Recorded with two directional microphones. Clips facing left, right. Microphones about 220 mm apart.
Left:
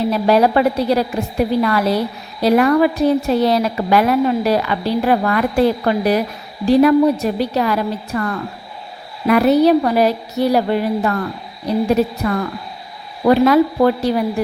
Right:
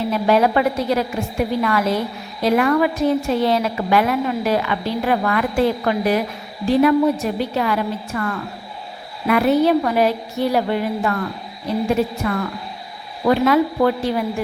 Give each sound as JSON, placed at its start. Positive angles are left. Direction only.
{"t": 0.1, "sound": "a woman's voice", "side_deg": 35}
{"t": 13.2, "sound": "a woman's voice", "side_deg": 35}